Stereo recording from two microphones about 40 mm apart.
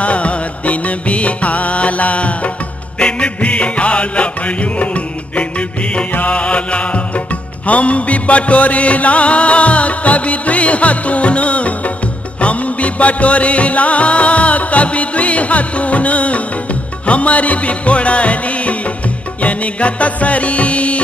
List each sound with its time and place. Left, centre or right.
0.0 s music: left
6.3 s mantra: left
7.6 s music: left